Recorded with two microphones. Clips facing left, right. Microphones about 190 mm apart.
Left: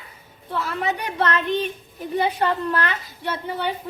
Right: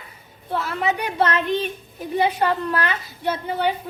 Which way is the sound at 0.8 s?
10° right (ahead or behind).